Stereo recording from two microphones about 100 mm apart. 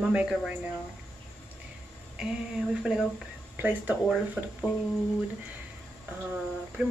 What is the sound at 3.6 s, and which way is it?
Speech, 20° right (ahead or behind).